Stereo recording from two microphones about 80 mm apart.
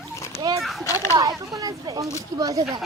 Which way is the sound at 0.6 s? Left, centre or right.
Centre.